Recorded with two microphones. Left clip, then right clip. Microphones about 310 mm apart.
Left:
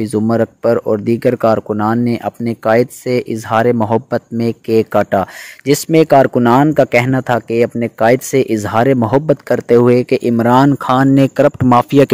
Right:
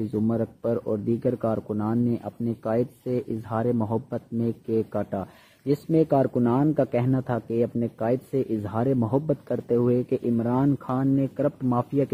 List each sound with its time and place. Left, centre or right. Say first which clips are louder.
0.1 s speech: left 15 dB; left